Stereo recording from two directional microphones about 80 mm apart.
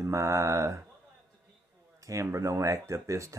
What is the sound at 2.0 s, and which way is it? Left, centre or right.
Speech, right.